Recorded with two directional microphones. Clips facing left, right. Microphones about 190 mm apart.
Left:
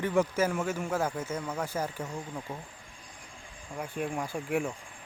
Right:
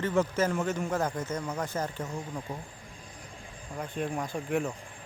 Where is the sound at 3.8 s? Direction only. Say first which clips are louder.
Right 1 dB; 10° left (ahead or behind).